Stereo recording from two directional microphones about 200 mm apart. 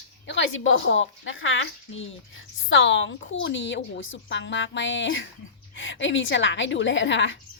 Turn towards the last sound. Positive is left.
turn(degrees=70)  # may be behind; listen again after turning